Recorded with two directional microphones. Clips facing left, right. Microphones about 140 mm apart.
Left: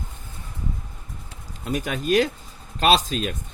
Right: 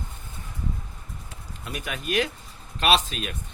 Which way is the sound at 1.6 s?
40° left (ahead or behind).